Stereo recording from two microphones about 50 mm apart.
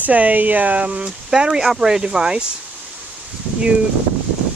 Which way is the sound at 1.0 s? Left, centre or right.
Centre.